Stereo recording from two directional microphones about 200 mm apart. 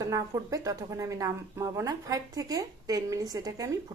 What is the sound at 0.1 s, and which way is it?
Speech, 15° right (ahead or behind).